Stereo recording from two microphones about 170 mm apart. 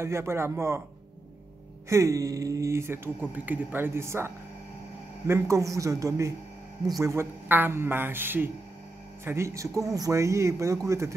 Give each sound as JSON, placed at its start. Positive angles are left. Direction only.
{"t": 0.0, "sound": "speech", "side_deg": -15}
{"t": 1.9, "sound": "speech", "side_deg": -20}